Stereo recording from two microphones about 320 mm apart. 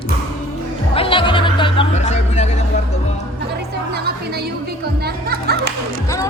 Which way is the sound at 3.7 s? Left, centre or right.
Right.